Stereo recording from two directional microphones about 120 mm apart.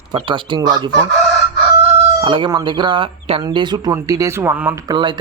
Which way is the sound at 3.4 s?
40° right (ahead or behind).